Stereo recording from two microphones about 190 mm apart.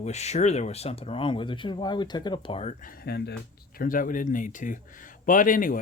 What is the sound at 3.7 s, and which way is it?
A man's voice, 45° left (ahead or behind).